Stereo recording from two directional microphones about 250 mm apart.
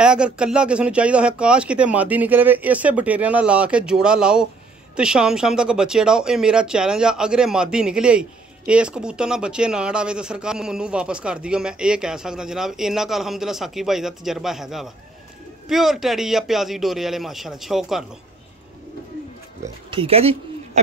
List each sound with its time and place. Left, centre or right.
0.0 s speech: centre
19.6 s speech: right